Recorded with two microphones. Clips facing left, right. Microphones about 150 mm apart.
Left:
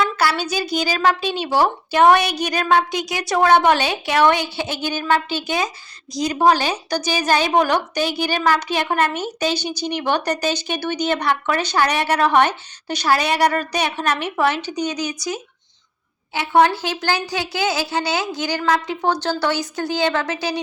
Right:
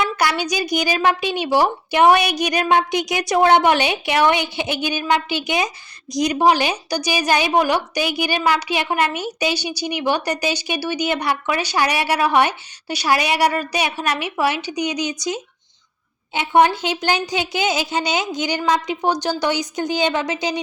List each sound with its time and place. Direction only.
0.2 s a woman's voice: 15° right (ahead or behind)